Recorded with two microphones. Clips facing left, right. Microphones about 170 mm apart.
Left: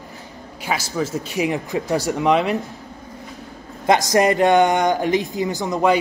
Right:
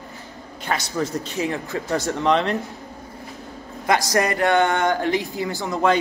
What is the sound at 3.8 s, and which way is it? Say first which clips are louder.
Speech: left 4 dB; 20° left (ahead or behind).